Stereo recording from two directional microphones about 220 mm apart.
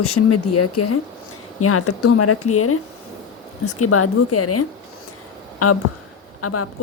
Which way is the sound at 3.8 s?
90° left.